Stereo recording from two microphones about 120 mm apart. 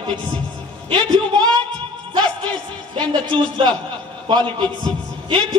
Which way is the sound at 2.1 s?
40° right (ahead or behind).